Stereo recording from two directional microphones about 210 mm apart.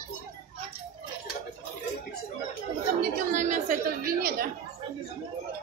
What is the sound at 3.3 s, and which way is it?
Speech, 35° right (ahead or behind).